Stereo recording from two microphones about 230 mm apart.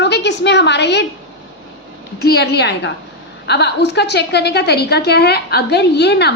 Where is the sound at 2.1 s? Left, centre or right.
Left.